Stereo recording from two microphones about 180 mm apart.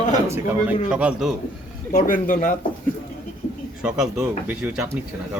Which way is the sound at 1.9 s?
50° left (ahead or behind).